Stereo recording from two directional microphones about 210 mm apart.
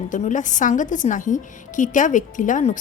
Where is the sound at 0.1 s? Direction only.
35° left (ahead or behind).